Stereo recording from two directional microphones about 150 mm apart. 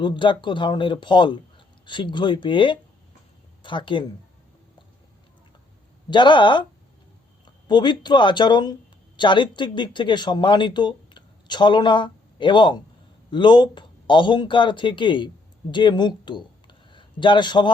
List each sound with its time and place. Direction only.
0.0 s speech: 30° left (ahead or behind)
6.1 s a man's voice: 30° left (ahead or behind)